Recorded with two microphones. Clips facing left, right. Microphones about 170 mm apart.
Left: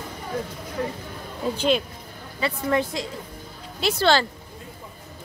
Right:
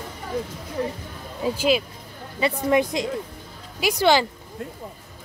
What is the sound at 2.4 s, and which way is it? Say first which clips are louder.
Speech: right 3 dB; 15° right (ahead or behind).